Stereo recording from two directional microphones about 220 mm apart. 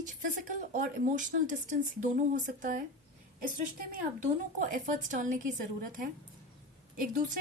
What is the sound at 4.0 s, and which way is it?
Speech, 40° right (ahead or behind).